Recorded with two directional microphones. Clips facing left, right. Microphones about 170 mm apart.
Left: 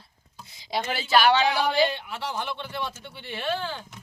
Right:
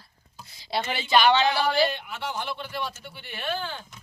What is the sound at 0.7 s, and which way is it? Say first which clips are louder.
A woman's voice: even; 10° left (ahead or behind).